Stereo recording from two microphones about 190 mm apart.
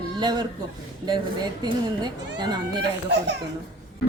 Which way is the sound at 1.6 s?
20° right (ahead or behind).